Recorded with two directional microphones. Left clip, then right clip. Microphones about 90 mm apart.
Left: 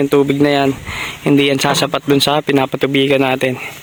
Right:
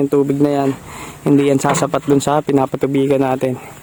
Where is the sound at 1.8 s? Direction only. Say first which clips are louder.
Left 1 dB; 5° right (ahead or behind).